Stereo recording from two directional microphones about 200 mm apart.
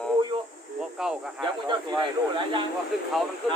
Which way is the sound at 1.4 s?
25° right (ahead or behind).